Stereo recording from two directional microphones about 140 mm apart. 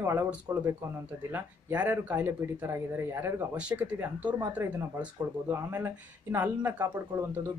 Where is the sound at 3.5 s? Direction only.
5° right (ahead or behind).